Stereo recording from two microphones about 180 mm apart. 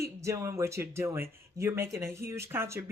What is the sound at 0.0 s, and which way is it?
Speech, 15° right (ahead or behind).